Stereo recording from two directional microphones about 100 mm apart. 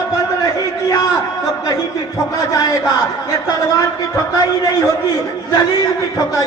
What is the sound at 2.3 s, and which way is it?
A man's voice, 35° left (ahead or behind).